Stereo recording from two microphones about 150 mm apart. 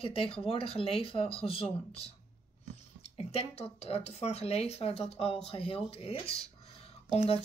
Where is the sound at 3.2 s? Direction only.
45° left (ahead or behind).